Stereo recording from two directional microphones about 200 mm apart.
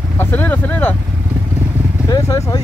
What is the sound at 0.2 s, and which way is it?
Speech, 10° left (ahead or behind).